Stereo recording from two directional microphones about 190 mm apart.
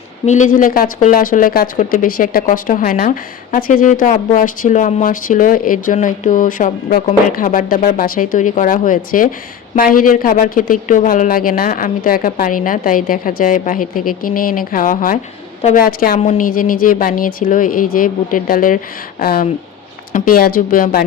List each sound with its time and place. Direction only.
0.3 s a woman's voice: 40° left (ahead or behind)